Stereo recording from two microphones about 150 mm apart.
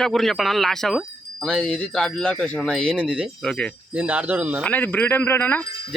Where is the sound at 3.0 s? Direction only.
10° right (ahead or behind).